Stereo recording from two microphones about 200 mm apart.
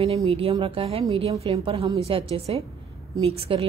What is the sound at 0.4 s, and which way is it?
A woman's voice, 25° right (ahead or behind).